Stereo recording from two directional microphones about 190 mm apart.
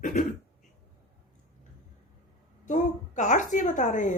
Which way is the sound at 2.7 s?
40° left (ahead or behind).